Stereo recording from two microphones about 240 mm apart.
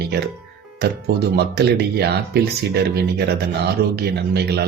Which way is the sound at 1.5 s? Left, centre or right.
Right.